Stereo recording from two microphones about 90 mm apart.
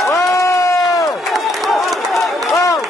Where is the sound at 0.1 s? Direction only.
35° left (ahead or behind).